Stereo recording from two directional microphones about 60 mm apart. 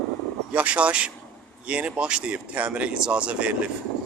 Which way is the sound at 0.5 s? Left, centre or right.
Right.